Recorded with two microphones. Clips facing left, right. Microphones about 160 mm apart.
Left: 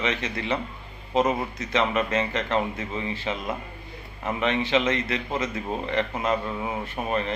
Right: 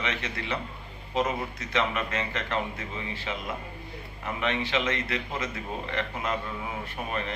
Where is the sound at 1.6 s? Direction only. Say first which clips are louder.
Left 3 dB; 25° left (ahead or behind).